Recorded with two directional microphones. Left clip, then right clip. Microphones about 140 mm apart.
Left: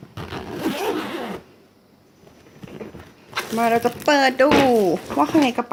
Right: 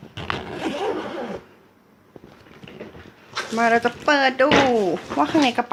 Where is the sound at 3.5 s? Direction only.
10° left (ahead or behind).